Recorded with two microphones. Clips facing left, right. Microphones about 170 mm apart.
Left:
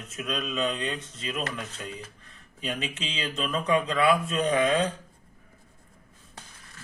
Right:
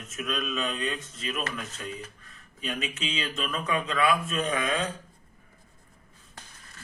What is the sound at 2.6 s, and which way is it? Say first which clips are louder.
Speech: even; 30° left (ahead or behind).